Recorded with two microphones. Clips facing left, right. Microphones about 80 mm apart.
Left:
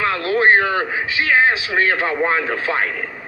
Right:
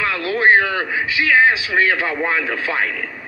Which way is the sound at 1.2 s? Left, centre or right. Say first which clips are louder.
Right 1 dB; left.